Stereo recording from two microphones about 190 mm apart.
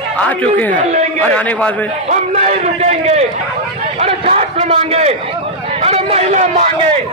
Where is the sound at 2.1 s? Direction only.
35° right (ahead or behind).